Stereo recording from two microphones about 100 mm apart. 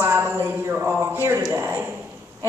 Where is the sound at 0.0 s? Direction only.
20° right (ahead or behind).